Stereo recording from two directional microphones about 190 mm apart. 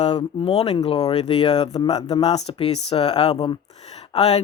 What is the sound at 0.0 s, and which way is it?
Speech, 35° left (ahead or behind).